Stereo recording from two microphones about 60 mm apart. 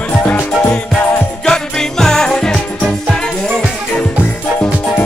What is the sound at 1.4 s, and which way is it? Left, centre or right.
Jingle bell, centre.